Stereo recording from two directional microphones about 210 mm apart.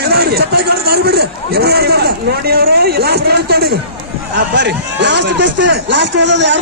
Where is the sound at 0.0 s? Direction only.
50° right (ahead or behind).